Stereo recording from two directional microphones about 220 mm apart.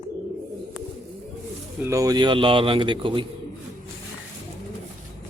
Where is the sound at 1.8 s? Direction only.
15° right (ahead or behind).